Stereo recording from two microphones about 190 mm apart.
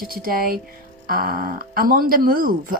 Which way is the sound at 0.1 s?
50° right (ahead or behind).